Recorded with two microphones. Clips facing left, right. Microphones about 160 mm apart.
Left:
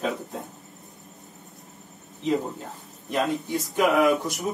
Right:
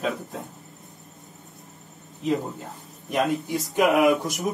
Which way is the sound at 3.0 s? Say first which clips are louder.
Right 2 dB; centre (ahead or behind).